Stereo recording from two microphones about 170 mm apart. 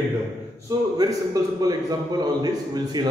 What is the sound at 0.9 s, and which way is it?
A man's voice, 20° right (ahead or behind).